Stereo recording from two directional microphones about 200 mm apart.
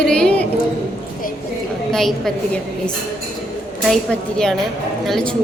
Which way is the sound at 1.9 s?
Centre (ahead or behind).